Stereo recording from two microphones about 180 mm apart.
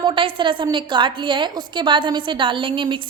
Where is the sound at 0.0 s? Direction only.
30° right (ahead or behind).